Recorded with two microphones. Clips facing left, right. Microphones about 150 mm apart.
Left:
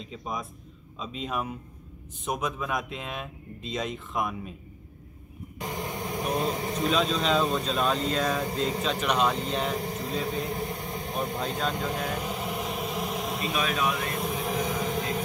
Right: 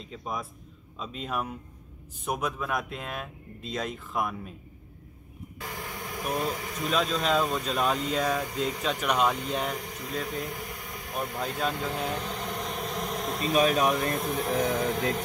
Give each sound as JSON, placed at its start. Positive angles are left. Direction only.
{"t": 0.1, "sound": "speech", "side_deg": 0}
{"t": 5.6, "sound": "vehicle", "side_deg": 20}
{"t": 6.9, "sound": "speech", "side_deg": -5}
{"t": 9.8, "sound": "a sound", "side_deg": 30}
{"t": 10.4, "sound": "speech", "side_deg": 25}
{"t": 11.7, "sound": "vehicle", "side_deg": 15}
{"t": 13.5, "sound": "speech", "side_deg": -40}
{"t": 14.1, "sound": "speech", "side_deg": 0}
{"t": 15.0, "sound": "vehicle", "side_deg": 5}